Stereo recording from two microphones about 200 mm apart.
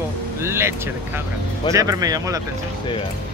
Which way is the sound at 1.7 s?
15° right (ahead or behind).